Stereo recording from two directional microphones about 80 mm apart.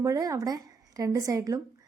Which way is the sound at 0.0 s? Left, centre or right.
Right.